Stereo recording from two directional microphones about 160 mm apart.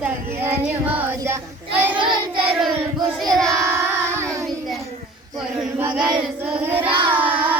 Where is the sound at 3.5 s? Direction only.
20° right (ahead or behind).